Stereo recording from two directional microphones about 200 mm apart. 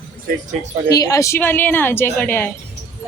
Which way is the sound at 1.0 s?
15° left (ahead or behind).